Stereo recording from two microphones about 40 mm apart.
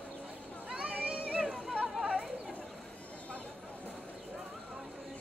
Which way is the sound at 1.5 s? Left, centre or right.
Centre.